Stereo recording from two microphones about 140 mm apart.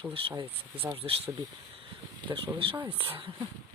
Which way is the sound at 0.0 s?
35° right (ahead or behind).